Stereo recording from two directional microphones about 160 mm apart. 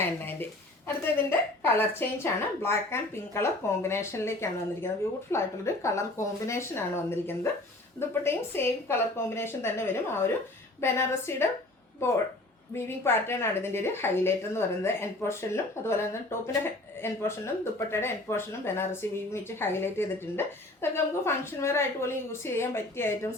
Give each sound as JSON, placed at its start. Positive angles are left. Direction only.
{"t": 0.0, "sound": "a sound", "side_deg": 10}
{"t": 0.9, "sound": "speech", "side_deg": 15}
{"t": 12.7, "sound": "speech", "side_deg": 15}